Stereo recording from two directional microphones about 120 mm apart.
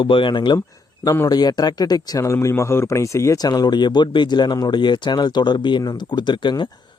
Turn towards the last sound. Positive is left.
turn(degrees=40)  # may be behind; listen again after turning